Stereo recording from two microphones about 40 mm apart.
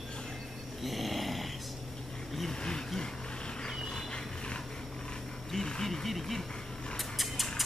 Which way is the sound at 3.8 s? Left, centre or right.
Centre.